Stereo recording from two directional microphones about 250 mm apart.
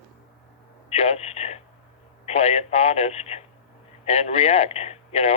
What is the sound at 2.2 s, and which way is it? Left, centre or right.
A man's voice, left.